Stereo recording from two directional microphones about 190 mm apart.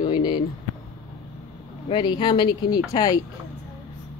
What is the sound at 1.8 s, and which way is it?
Speech, 25° left (ahead or behind).